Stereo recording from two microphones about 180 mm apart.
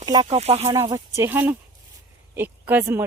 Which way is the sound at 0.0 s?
20° right (ahead or behind).